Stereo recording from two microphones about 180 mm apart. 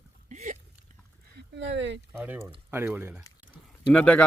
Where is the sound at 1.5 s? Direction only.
90° right.